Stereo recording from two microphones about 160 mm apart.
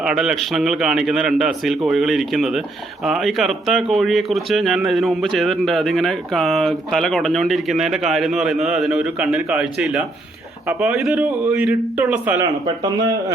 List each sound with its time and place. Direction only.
0.0 s a man's voice: centre (ahead or behind)
12.4 s speech: 20° right (ahead or behind)